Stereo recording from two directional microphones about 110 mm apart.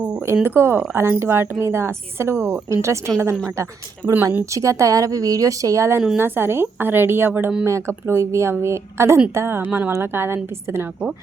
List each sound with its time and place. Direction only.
0.4 s a woman's voice: 20° right (ahead or behind)